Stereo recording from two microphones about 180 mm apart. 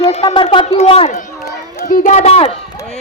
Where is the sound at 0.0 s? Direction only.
35° left (ahead or behind).